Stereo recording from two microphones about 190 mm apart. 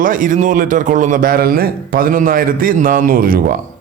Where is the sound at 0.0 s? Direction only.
45° right (ahead or behind).